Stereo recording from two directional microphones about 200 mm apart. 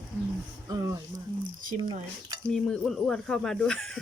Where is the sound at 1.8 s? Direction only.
20° right (ahead or behind).